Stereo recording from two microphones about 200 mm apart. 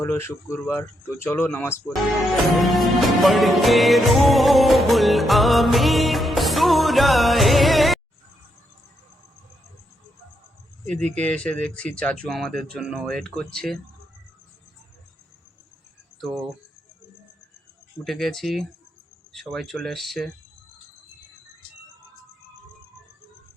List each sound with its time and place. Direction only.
0.0 s speech: 10° left (ahead or behind)
2.1 s music: centre (ahead or behind)
11.1 s speech: 5° left (ahead or behind)
18.0 s speech: centre (ahead or behind)